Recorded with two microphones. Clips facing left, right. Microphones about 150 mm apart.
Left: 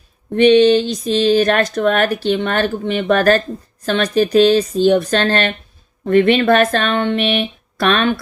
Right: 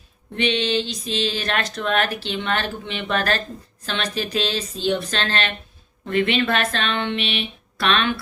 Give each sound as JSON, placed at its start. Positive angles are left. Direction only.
{"t": 0.3, "sound": "speech", "side_deg": 45}